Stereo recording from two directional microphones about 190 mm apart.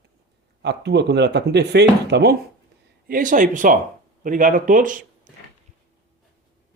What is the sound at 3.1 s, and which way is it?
Speech, 45° right (ahead or behind).